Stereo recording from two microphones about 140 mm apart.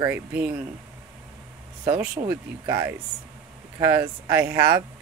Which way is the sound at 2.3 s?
20° right (ahead or behind).